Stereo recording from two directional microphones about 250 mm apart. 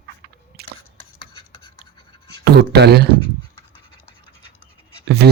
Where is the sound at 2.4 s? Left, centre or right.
Right.